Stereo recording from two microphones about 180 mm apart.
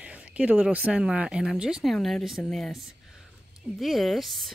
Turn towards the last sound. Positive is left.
turn(degrees=0)  # may be behind; listen again after turning